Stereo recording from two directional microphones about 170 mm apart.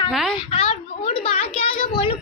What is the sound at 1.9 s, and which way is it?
Child singing, 30° left (ahead or behind).